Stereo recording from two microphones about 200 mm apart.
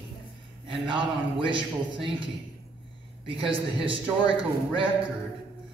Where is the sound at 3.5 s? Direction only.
25° right (ahead or behind).